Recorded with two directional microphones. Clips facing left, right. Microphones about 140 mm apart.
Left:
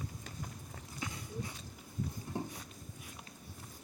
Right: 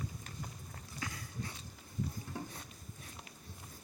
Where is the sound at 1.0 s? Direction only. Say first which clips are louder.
Left 2 dB; 20° left (ahead or behind).